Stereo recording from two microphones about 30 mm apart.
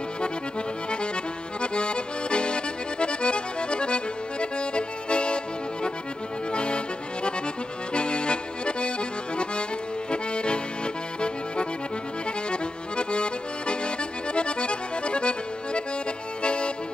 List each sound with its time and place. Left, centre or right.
1.6 s accordion: left
7.9 s accordion: left
10.1 s accordion: left